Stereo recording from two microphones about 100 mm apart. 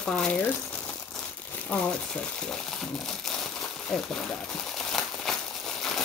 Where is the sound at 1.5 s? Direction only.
10° left (ahead or behind).